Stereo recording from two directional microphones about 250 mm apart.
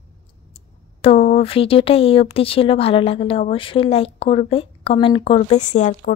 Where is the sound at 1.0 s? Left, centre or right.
Left.